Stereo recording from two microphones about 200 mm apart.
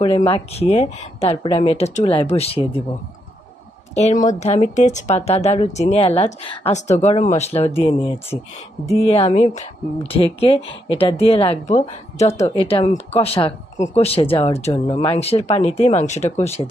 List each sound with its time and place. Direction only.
0.0 s speech: 30° left (ahead or behind)
3.9 s speech: 35° left (ahead or behind)